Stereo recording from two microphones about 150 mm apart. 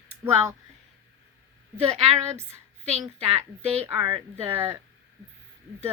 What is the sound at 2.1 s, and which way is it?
Speech, 15° right (ahead or behind).